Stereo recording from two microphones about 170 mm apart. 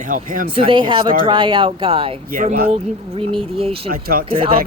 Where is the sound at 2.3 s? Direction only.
55° right (ahead or behind).